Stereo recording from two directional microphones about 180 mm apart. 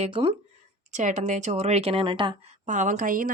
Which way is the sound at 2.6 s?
45° right (ahead or behind).